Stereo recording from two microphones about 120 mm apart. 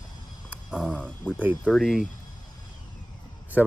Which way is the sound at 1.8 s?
5° right (ahead or behind).